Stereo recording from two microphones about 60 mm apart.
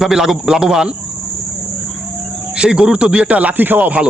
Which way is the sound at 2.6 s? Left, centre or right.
Centre.